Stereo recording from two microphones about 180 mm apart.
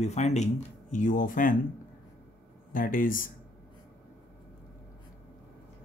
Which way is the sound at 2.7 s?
50° left (ahead or behind).